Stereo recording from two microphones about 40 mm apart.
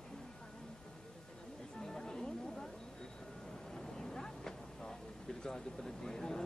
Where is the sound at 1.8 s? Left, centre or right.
Centre.